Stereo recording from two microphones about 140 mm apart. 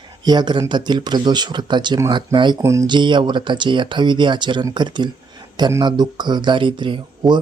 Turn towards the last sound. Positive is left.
turn(degrees=-30)  # may be behind; listen again after turning